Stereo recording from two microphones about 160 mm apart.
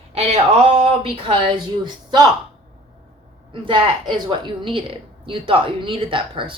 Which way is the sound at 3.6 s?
30° right (ahead or behind).